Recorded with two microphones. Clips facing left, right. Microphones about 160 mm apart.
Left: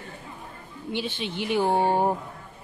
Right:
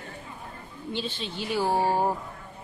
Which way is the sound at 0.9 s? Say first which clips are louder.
Left 3 dB; 15° left (ahead or behind).